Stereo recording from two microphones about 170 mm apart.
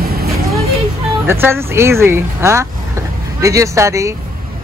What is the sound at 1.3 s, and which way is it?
Speech, 15° right (ahead or behind).